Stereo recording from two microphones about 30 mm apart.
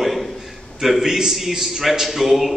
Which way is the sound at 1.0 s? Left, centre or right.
Centre.